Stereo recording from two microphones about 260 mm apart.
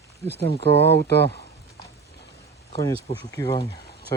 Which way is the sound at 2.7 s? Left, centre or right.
Centre.